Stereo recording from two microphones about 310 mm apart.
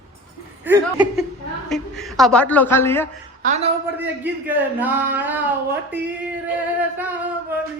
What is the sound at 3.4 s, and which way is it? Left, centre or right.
Speech, right.